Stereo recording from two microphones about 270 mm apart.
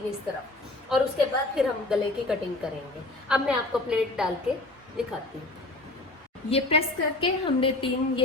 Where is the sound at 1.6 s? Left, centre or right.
Centre.